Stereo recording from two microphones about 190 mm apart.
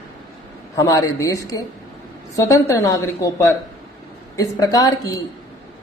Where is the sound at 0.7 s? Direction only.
15° left (ahead or behind).